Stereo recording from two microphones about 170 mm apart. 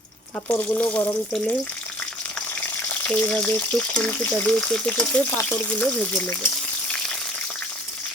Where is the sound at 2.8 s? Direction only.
10° left (ahead or behind).